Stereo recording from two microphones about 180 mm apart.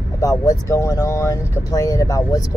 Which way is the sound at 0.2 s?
20° left (ahead or behind).